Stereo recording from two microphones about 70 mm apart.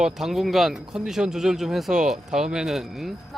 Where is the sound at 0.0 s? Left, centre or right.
Centre.